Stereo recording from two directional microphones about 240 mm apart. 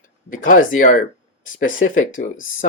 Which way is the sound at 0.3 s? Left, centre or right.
Left.